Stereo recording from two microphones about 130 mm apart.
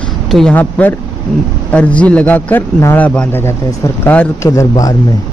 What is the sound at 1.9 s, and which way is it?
A man's voice, 10° left (ahead or behind).